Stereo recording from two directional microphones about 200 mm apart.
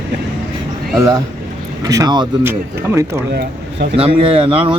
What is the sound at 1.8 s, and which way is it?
Speech, 15° right (ahead or behind).